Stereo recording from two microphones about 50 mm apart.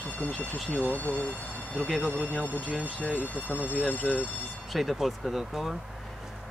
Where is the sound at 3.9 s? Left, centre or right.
Left.